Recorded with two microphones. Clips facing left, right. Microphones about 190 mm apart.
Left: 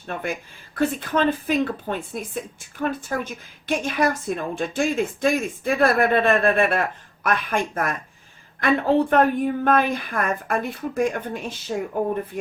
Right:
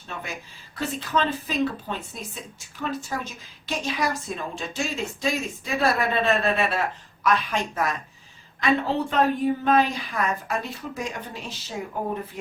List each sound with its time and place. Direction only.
0.1 s a woman's voice: 55° left (ahead or behind)